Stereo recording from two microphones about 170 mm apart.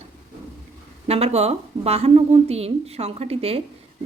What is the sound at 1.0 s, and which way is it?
A woman's voice, 35° right (ahead or behind).